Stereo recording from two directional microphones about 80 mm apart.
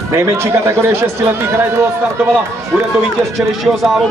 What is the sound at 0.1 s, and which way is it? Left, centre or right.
Speech, right.